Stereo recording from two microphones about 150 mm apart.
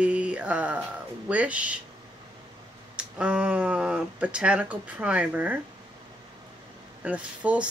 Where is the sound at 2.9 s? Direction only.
5° right (ahead or behind).